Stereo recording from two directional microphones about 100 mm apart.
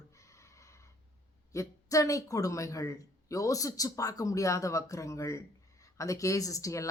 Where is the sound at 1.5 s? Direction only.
35° left (ahead or behind).